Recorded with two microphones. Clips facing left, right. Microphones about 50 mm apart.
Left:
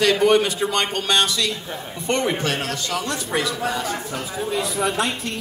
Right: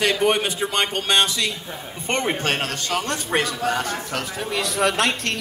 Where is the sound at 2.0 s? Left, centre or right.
Right.